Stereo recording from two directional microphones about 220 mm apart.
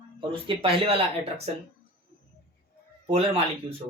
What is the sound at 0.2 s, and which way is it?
Speech, 25° right (ahead or behind).